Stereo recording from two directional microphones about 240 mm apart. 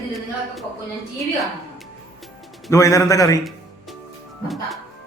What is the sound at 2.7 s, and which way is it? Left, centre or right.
Speech, centre.